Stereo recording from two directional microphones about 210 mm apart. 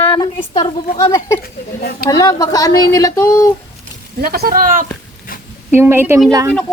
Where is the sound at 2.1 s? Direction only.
20° left (ahead or behind).